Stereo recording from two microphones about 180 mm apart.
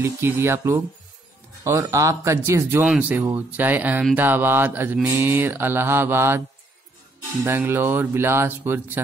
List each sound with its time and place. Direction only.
0.0 s speech: 15° right (ahead or behind)
2.8 s speech: 5° right (ahead or behind)
7.4 s speech: 10° right (ahead or behind)